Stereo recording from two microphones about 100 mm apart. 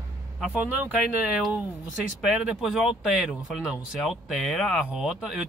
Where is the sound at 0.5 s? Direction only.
15° right (ahead or behind).